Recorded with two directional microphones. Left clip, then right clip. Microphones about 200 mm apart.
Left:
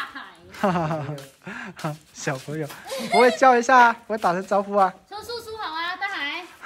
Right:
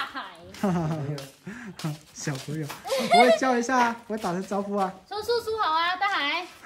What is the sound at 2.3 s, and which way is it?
Speech, centre (ahead or behind).